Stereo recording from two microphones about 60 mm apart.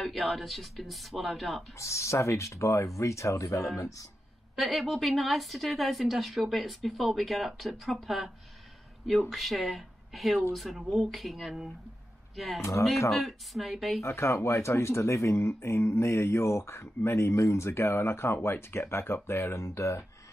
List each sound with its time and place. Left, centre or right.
0.0 s speech: centre
1.8 s speech: left
4.6 s speech: centre
9.3 s speech: centre
14.0 s speech: left